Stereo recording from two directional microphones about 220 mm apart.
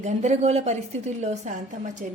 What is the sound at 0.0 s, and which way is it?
A woman's voice, 30° right (ahead or behind).